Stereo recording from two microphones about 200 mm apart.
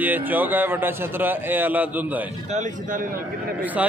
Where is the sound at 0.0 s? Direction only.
10° right (ahead or behind).